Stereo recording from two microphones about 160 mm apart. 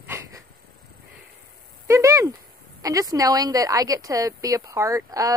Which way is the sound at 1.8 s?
20° right (ahead or behind).